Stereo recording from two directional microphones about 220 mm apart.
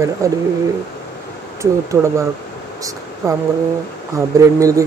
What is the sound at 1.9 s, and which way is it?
Speech, 15° right (ahead or behind).